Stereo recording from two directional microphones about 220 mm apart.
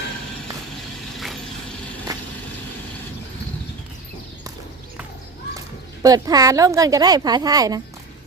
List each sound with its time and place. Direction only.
2.1 s vehicle: 15° right (ahead or behind)
5.5 s speech: 15° right (ahead or behind)